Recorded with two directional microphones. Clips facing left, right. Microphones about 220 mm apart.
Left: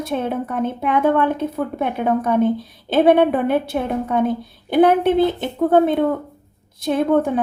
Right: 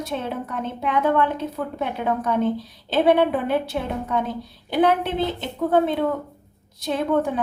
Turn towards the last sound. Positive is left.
turn(degrees=50)  # may be behind; listen again after turning